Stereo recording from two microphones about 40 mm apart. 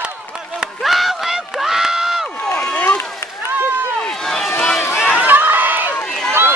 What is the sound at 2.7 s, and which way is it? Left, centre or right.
Run, left.